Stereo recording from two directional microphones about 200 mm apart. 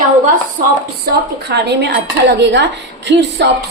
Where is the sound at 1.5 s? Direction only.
60° right (ahead or behind).